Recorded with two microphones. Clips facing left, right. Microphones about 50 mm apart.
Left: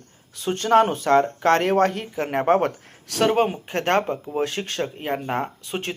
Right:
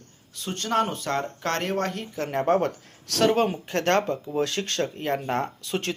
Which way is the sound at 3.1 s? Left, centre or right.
Centre.